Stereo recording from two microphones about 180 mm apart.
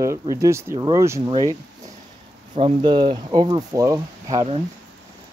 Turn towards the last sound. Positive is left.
turn(degrees=-20)  # may be behind; listen again after turning